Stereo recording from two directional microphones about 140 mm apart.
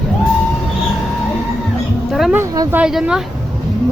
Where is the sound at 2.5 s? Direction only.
25° right (ahead or behind).